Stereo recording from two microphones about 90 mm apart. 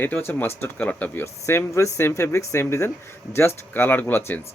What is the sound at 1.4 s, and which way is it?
Speech, 30° left (ahead or behind).